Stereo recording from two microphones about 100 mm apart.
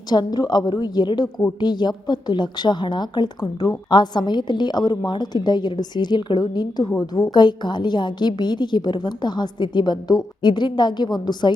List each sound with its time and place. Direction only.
0.1 s a woman's voice: 40° left (ahead or behind)